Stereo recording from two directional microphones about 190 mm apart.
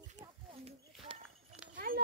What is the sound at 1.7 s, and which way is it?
Horse, 50° right (ahead or behind).